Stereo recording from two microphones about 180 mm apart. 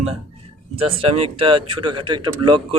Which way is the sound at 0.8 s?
30° right (ahead or behind).